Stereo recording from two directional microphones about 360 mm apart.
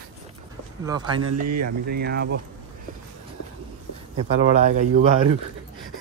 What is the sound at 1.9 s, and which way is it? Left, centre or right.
Speech, right.